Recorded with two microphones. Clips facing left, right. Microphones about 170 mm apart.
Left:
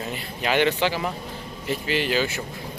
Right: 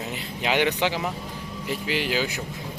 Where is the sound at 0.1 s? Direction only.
15° right (ahead or behind).